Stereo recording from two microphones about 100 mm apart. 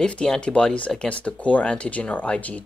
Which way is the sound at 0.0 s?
10° left (ahead or behind).